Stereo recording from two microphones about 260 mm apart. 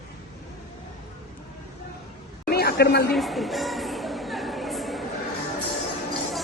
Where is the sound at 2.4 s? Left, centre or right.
Left.